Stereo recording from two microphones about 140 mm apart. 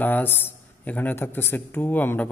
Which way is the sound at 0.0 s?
15° left (ahead or behind).